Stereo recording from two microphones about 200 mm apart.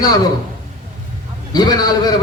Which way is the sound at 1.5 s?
20° left (ahead or behind).